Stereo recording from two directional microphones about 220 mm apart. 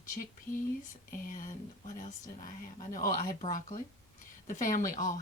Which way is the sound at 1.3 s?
35° left (ahead or behind).